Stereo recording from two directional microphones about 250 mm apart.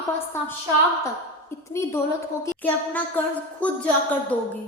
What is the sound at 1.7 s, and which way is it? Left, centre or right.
Speech, centre.